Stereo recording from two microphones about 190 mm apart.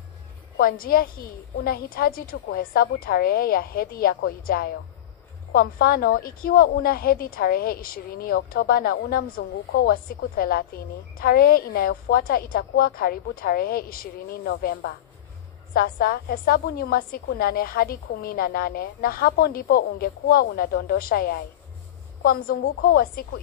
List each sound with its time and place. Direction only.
0.6 s a woman's voice: 50° left (ahead or behind)